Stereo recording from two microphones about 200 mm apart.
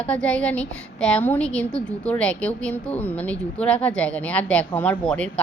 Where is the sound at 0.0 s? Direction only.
5° left (ahead or behind).